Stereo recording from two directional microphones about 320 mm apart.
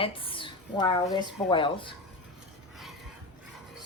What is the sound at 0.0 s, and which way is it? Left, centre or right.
A woman's voice, centre.